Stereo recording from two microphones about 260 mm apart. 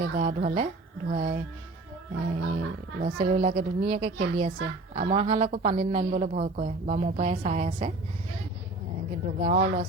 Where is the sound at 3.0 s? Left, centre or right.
Right.